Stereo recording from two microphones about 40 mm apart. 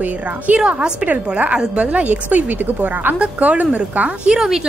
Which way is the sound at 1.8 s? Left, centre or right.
Right.